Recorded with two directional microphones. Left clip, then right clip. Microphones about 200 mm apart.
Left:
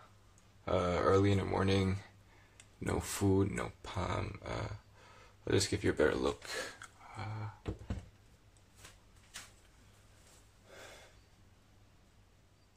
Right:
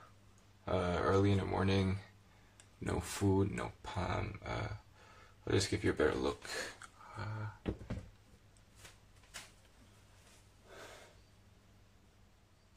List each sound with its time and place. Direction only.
0.7 s speech: 15° left (ahead or behind)